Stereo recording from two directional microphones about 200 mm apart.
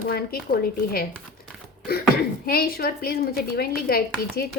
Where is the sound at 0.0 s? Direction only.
50° left (ahead or behind).